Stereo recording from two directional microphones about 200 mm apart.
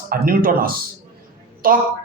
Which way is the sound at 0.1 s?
45° right (ahead or behind).